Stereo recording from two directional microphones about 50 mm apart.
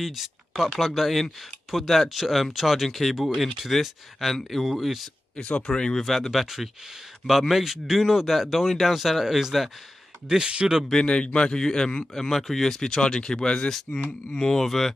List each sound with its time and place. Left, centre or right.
0.0 s speech: centre
5.7 s speech: centre
10.2 s speech: centre
10.9 s speech: centre